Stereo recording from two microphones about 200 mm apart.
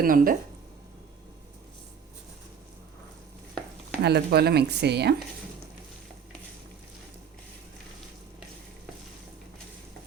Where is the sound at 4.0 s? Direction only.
55° right (ahead or behind).